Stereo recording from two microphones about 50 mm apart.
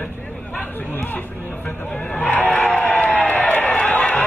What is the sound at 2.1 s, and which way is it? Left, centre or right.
Speech, left.